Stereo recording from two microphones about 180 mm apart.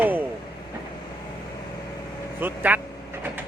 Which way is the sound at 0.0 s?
10° right (ahead or behind).